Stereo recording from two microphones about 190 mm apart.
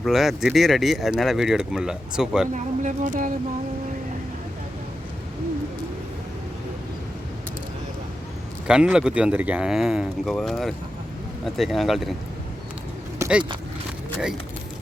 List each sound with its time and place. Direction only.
0.0 s speech: centre (ahead or behind)
2.5 s speech: 40° right (ahead or behind)
8.6 s speech: 5° right (ahead or behind)
13.1 s vehicle: 5° right (ahead or behind)